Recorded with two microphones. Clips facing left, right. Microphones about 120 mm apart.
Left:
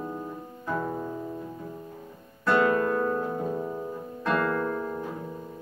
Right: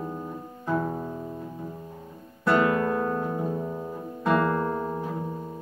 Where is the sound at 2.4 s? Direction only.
15° right (ahead or behind).